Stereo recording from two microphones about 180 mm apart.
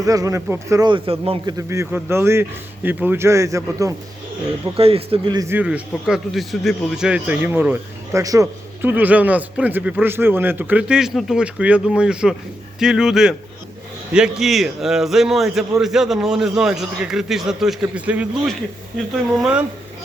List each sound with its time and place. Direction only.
0.0 s a man's voice: 20° right (ahead or behind)
1.5 s a man's voice: 15° right (ahead or behind)
4.8 s speech: 35° right (ahead or behind)
5.5 s a man's voice: 10° right (ahead or behind)